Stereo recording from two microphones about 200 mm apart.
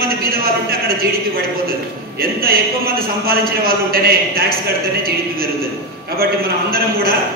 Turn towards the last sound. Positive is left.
turn(degrees=-50)  # may be behind; listen again after turning